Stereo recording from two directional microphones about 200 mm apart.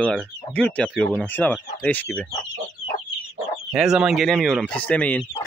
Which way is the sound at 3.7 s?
5° right (ahead or behind).